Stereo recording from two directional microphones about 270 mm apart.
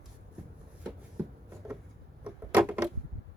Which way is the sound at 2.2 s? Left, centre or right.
Centre.